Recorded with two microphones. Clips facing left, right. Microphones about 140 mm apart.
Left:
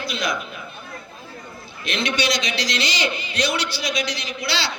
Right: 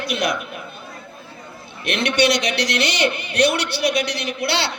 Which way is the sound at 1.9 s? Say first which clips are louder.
Right 5 dB; 65° right (ahead or behind).